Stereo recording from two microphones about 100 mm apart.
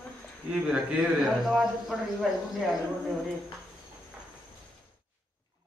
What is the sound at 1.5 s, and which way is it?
Speech, centre (ahead or behind).